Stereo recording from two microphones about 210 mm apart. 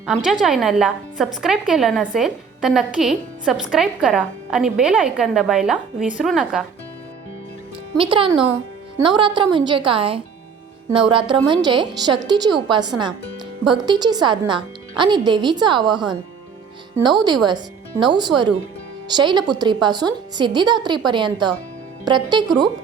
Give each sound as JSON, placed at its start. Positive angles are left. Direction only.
{"t": 0.0, "sound": "a woman's voice", "side_deg": 0}
{"t": 7.9, "sound": "a woman's voice", "side_deg": -25}